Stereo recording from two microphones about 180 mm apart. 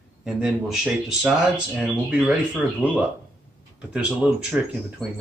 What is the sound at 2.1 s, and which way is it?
Speech, 5° right (ahead or behind).